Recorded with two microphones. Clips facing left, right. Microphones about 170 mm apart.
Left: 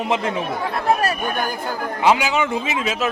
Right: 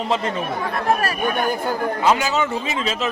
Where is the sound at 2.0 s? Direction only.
15° left (ahead or behind).